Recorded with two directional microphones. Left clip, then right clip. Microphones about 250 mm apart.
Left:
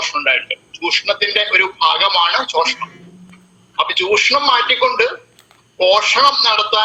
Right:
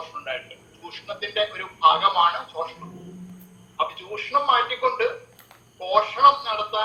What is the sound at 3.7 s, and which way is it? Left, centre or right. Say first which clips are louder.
Speech: left 13 dB; left.